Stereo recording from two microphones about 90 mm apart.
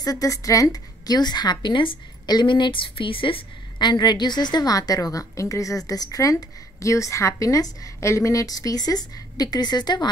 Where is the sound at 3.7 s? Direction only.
50° left (ahead or behind).